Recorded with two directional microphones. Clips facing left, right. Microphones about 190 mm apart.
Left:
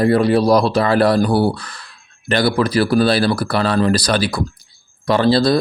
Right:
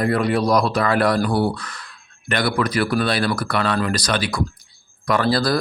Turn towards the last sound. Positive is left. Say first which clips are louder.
# left 5 dB
turn(degrees=25)  # may be behind; listen again after turning